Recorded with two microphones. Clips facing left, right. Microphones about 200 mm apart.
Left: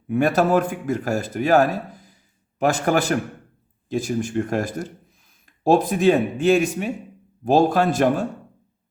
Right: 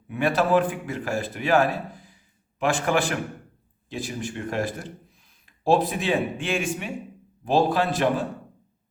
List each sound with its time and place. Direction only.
0.1 s a man's voice: 45° left (ahead or behind)